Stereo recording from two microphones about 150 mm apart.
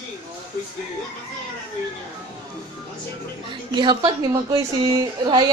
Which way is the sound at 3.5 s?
30° right (ahead or behind).